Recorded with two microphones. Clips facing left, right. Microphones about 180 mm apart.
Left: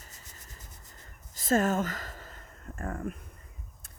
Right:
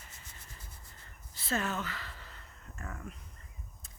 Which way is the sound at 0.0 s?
40° left (ahead or behind).